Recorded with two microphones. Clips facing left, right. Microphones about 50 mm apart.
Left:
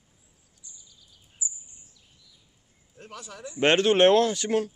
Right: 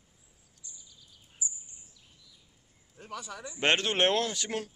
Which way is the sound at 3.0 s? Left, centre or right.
Centre.